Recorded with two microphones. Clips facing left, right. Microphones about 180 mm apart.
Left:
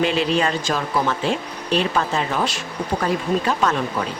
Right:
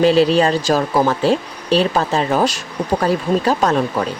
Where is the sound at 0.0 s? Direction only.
35° right (ahead or behind).